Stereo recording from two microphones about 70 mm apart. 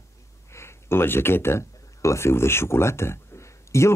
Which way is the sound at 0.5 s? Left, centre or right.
Left.